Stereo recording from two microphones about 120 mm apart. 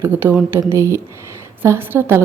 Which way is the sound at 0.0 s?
15° right (ahead or behind).